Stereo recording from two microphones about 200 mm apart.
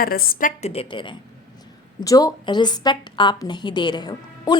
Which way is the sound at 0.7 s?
25° left (ahead or behind).